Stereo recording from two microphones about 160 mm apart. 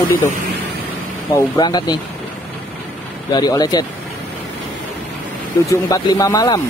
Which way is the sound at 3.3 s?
25° left (ahead or behind).